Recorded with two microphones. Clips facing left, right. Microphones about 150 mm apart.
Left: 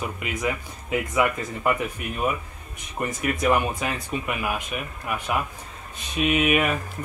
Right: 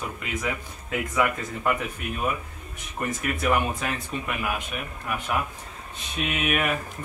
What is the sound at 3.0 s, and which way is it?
Speech, 15° left (ahead or behind).